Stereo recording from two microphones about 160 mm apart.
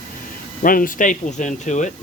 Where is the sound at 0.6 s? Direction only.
60° left (ahead or behind).